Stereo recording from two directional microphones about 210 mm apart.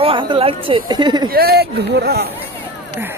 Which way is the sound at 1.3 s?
45° right (ahead or behind).